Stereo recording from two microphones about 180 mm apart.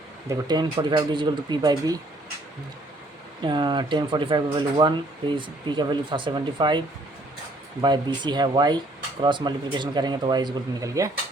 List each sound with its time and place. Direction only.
0.3 s speech: 25° right (ahead or behind)
3.4 s speech: 25° right (ahead or behind)